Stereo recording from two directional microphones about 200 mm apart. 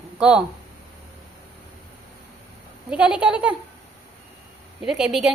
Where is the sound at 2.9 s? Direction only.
5° right (ahead or behind).